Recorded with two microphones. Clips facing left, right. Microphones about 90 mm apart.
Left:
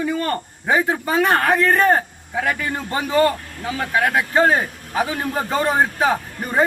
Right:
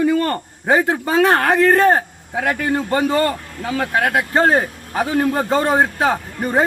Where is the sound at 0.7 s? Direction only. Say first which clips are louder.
Right 3 dB; 40° right (ahead or behind).